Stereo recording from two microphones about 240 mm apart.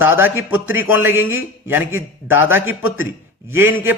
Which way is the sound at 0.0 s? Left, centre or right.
Centre.